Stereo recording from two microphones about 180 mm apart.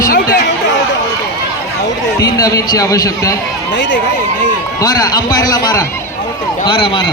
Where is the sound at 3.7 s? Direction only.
90° left.